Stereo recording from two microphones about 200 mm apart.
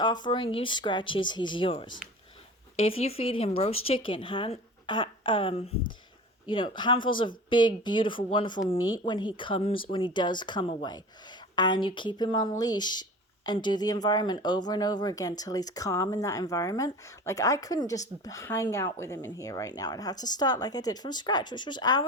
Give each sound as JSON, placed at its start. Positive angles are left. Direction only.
{"t": 0.0, "sound": "speech", "side_deg": 20}